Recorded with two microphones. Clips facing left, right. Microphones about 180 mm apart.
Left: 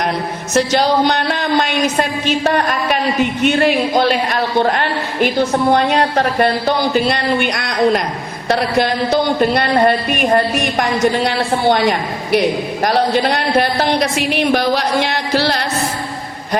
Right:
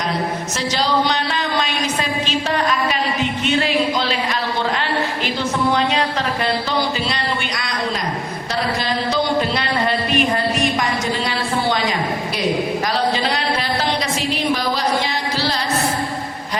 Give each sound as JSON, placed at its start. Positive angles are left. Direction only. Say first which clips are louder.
{"t": 0.5, "sound": "a woman's voice", "louder": "left 8 dB", "side_deg": 60}